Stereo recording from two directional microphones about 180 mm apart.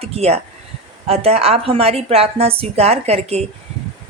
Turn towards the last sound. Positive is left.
turn(degrees=-35)  # may be behind; listen again after turning